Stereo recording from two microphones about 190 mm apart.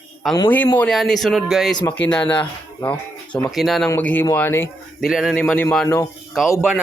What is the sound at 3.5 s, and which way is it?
Speech, centre (ahead or behind).